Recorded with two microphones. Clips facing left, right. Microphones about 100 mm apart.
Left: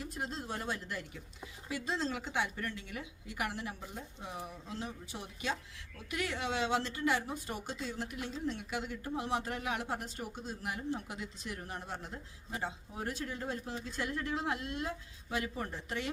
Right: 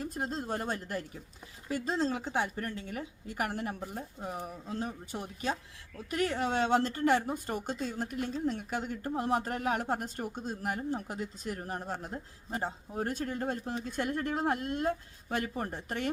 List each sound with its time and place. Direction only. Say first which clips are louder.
0.0 s a woman's voice: right 5 dB; 40° right (ahead or behind)